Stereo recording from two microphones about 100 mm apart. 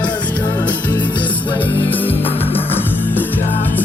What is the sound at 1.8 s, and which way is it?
Music, 20° left (ahead or behind).